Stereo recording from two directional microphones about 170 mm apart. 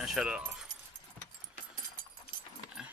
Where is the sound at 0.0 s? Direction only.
5° right (ahead or behind).